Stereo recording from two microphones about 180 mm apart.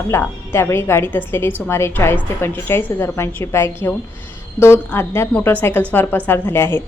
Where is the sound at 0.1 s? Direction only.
15° left (ahead or behind).